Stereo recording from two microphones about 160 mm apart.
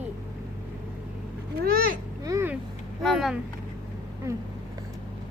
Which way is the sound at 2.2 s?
15° right (ahead or behind).